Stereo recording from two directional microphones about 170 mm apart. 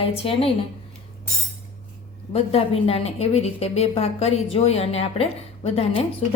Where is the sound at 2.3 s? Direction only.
35° left (ahead or behind).